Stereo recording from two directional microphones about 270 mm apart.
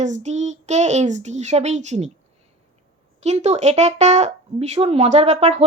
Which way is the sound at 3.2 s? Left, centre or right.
Right.